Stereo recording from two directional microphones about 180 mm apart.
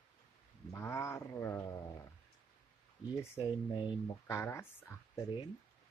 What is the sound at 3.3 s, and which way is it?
Speech, 25° left (ahead or behind).